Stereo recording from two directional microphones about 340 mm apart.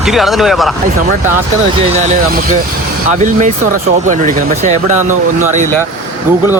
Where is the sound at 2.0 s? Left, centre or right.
Right.